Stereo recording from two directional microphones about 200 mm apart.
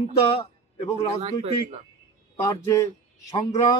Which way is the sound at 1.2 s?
30° right (ahead or behind).